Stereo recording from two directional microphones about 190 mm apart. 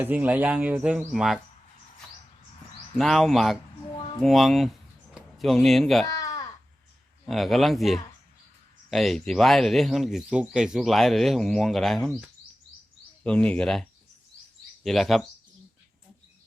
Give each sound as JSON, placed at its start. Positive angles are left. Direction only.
{"t": 0.0, "sound": "speech", "side_deg": -10}
{"t": 2.9, "sound": "speech", "side_deg": 0}
{"t": 6.1, "sound": "a sound", "side_deg": 20}
{"t": 7.3, "sound": "speech", "side_deg": 0}
{"t": 14.8, "sound": "speech", "side_deg": 0}